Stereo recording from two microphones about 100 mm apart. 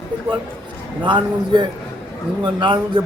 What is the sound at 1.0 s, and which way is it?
A man's voice, 50° right (ahead or behind).